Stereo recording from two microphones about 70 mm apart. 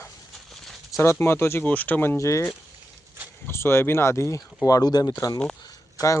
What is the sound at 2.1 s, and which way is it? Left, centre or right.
Speech, left.